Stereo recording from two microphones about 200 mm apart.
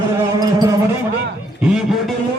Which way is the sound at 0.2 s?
20° right (ahead or behind).